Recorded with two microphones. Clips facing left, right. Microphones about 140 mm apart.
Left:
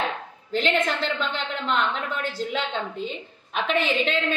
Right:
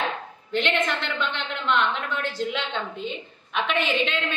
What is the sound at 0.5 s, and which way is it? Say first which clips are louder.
A woman's voice: left 1 dB; 40° left (ahead or behind).